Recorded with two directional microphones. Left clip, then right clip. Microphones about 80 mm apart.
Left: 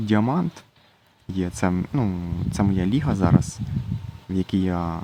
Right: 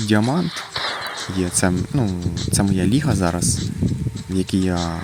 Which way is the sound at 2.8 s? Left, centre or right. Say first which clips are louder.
Right 4 dB; right.